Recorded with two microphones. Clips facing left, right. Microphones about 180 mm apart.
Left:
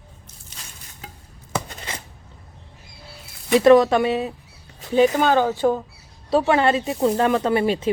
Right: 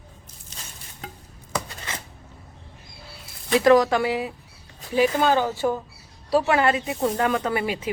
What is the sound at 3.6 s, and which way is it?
Speech, 25° left (ahead or behind).